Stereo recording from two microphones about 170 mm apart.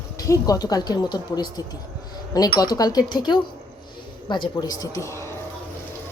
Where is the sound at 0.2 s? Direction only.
20° left (ahead or behind).